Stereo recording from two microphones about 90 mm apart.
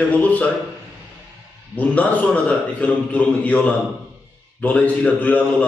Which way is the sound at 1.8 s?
15° left (ahead or behind).